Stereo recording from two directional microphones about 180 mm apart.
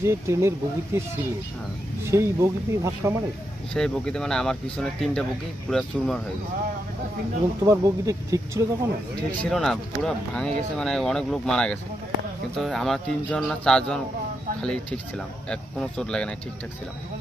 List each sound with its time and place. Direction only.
0.0 s speech: 15° right (ahead or behind)
2.0 s speech: 15° right (ahead or behind)
3.7 s speech: 5° left (ahead or behind)
7.6 s speech: 20° right (ahead or behind)
9.4 s speech: centre (ahead or behind)